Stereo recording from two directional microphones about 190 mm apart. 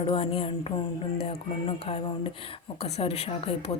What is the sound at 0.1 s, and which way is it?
Speech, 30° left (ahead or behind).